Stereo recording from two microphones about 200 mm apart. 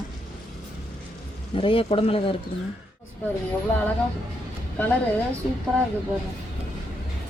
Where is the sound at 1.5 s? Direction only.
25° left (ahead or behind).